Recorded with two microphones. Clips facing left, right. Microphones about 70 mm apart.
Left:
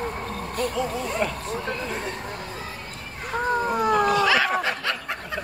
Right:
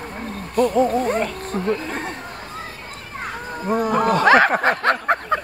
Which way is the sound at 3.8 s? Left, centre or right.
Right.